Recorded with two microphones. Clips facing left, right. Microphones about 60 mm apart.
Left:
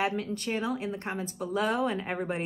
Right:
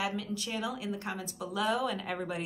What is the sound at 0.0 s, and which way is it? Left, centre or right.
A woman's voice, left.